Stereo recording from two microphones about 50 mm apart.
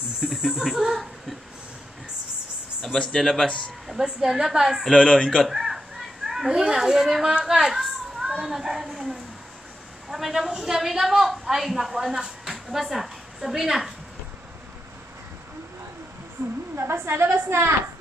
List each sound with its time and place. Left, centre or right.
0.2 s speech: centre
2.8 s speech: centre
3.4 s speech: left
3.8 s a woman's voice: centre
4.9 s speech: centre
5.4 s a sound: centre
6.6 s a woman's voice: centre
10.0 s a woman's voice: centre
16.4 s a sound: right
16.7 s a woman's voice: right